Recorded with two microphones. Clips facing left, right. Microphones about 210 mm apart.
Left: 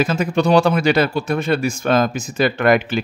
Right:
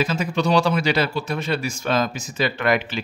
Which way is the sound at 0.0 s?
50° left (ahead or behind).